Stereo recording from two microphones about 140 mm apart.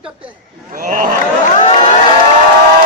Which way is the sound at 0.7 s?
80° right.